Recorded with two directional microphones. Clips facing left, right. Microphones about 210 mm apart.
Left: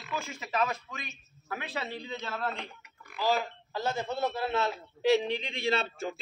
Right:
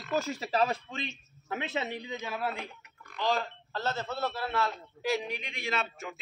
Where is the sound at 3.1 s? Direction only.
5° left (ahead or behind); by 6.2 s 30° left (ahead or behind).